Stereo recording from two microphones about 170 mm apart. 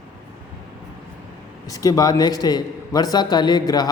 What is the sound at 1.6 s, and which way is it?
A man's voice, 20° left (ahead or behind).